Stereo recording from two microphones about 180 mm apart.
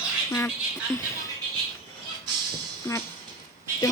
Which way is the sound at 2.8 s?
15° left (ahead or behind).